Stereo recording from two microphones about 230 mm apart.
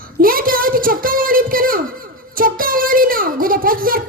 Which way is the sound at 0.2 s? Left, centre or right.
Right.